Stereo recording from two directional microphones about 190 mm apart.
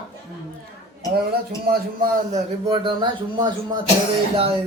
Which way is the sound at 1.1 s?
55° right (ahead or behind).